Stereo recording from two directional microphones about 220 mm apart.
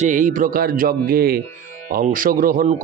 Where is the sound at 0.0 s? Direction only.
35° right (ahead or behind).